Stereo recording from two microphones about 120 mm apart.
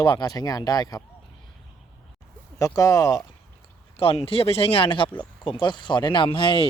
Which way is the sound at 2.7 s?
30° left (ahead or behind).